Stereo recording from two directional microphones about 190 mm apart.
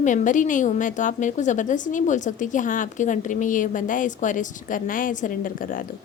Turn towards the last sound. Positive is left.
turn(degrees=45)  # may be behind; listen again after turning